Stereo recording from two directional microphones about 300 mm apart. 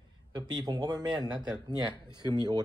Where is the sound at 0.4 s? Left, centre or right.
Centre.